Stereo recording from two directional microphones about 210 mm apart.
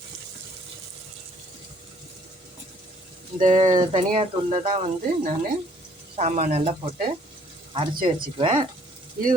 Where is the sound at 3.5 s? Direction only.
25° right (ahead or behind).